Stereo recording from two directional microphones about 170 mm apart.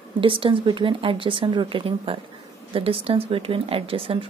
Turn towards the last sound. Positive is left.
turn(degrees=-35)  # may be behind; listen again after turning